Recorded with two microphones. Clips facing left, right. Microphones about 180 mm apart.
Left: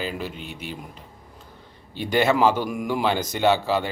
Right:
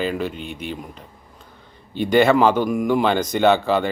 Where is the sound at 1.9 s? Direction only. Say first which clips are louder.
Right 5 dB; 5° left (ahead or behind).